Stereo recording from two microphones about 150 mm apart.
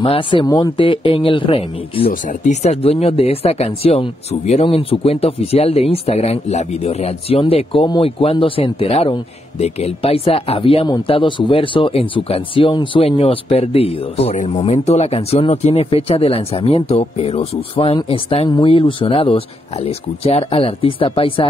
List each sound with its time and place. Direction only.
0.0 s speech: 35° left (ahead or behind)
2.0 s speech: 55° left (ahead or behind); by 21.5 s 35° left (ahead or behind)